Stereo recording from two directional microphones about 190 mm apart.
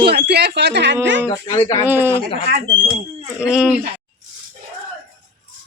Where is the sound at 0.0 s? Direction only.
55° right (ahead or behind).